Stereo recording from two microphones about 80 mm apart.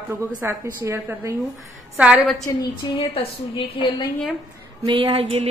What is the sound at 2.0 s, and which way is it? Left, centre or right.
Speech, centre.